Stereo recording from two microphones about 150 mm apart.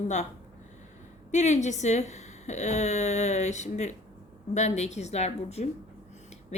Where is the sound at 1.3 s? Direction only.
50° left (ahead or behind).